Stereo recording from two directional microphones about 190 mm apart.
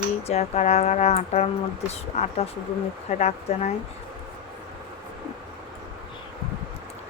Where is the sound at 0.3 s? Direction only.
35° left (ahead or behind).